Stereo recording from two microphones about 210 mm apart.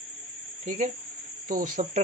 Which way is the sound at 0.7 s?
35° right (ahead or behind).